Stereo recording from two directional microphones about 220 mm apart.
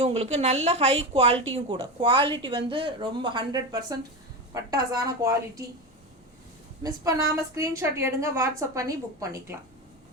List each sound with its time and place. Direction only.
0.0 s a woman's voice: 30° right (ahead or behind)
6.8 s a woman's voice: 15° right (ahead or behind)